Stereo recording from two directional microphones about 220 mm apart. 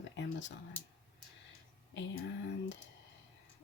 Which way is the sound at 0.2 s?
55° left (ahead or behind).